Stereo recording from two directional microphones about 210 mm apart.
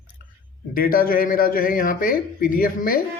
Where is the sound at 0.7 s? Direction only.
45° left (ahead or behind).